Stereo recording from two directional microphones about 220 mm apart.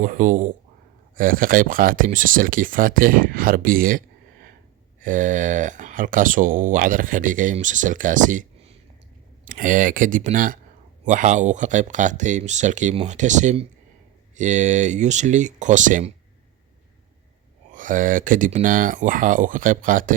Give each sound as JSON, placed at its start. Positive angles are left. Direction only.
{"t": 0.0, "sound": "speech", "side_deg": -35}
{"t": 17.7, "sound": "speech", "side_deg": -35}